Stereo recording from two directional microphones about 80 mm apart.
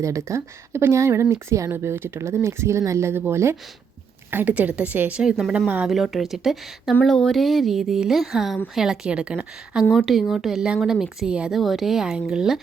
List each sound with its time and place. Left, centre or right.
0.0 s a woman's voice: right; by 5.9 s centre
5.9 s speech: centre
7.0 s a woman's voice: centre
9.9 s speech: centre
11.6 s speech: centre